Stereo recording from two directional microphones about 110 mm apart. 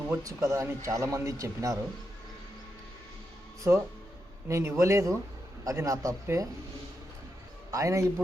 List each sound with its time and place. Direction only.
0.2 s speech: 30° right (ahead or behind)
3.6 s speech: 25° right (ahead or behind)
7.7 s speech: 30° right (ahead or behind)